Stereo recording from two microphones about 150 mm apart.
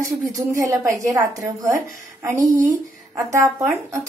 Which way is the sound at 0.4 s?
20° right (ahead or behind).